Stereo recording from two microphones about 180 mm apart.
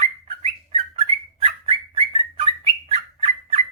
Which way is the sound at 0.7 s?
30° right (ahead or behind).